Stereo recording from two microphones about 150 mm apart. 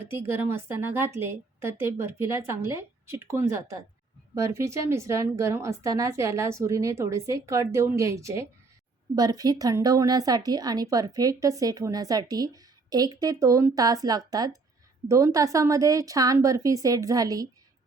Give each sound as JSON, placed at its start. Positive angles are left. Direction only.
{"t": 0.1, "sound": "a woman's voice", "side_deg": -15}